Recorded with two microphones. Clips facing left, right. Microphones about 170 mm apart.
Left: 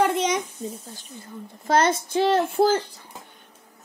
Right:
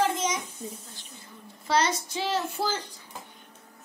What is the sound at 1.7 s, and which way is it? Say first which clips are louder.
Speech: left 5 dB; 50° left (ahead or behind).